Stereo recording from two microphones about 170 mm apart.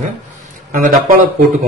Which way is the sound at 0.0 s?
45° right (ahead or behind).